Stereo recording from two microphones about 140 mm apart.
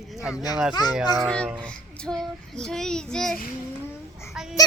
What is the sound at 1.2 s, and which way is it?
Child singing, 5° left (ahead or behind).